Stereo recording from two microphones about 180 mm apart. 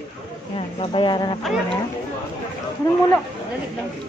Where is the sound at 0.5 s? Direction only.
30° left (ahead or behind).